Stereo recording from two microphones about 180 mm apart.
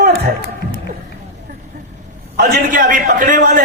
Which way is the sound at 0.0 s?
55° right (ahead or behind).